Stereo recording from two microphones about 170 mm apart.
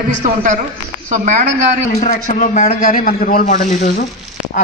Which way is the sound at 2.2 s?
50° left (ahead or behind).